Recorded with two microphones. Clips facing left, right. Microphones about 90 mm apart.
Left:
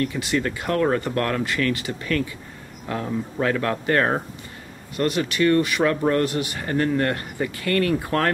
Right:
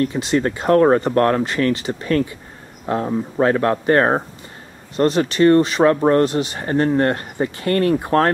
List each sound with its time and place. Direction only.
0.0 s speech: 30° right (ahead or behind)